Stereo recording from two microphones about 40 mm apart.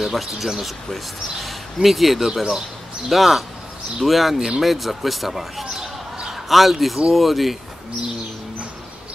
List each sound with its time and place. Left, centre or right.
0.0 s speech: centre
5.7 s a sound: centre
6.3 s speech: centre